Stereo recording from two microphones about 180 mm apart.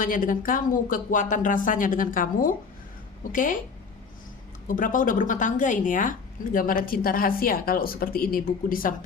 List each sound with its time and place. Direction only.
0.0 s speech: 50° left (ahead or behind)
4.7 s speech: 50° left (ahead or behind)